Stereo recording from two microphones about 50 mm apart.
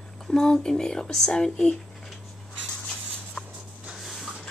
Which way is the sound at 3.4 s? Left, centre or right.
Left.